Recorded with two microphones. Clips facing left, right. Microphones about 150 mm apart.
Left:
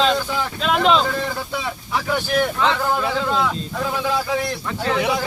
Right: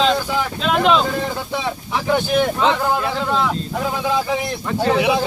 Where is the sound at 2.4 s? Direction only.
20° right (ahead or behind).